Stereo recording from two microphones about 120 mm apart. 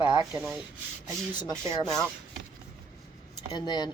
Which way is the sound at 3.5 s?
35° left (ahead or behind).